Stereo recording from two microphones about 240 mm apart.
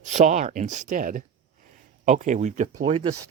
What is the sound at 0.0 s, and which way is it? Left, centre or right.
Speech, right.